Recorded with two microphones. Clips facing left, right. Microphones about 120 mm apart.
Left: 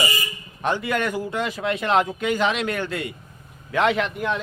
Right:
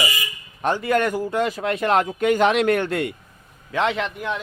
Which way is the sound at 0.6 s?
40° right (ahead or behind).